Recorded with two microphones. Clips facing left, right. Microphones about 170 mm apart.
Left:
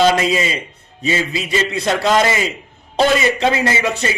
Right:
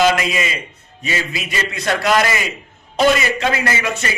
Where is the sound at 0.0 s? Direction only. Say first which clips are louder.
Left 2 dB; 30° left (ahead or behind).